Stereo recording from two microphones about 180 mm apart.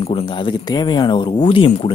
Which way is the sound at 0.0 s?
30° left (ahead or behind).